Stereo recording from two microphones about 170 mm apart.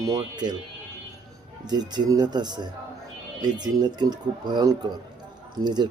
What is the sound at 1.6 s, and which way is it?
Speech, 25° right (ahead or behind).